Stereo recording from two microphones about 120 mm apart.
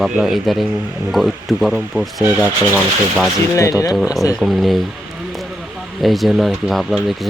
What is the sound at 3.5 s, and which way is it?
Speech, 25° left (ahead or behind).